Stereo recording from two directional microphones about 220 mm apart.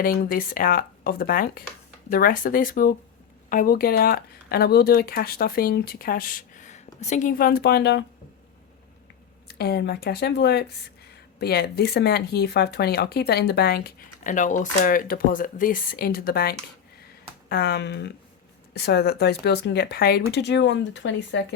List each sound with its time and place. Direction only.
0.0 s speech: 40° left (ahead or behind)
9.5 s speech: 45° left (ahead or behind)